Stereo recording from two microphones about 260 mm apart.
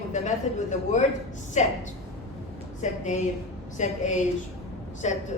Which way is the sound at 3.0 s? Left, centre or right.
Left.